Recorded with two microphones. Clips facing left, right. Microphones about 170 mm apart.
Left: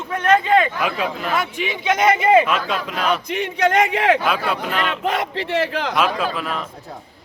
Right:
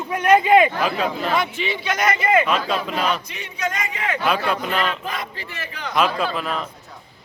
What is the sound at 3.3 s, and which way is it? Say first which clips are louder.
Speech: left 10 dB; 65° left (ahead or behind).